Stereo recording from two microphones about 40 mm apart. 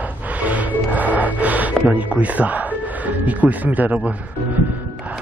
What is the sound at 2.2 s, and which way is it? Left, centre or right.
Speech, right.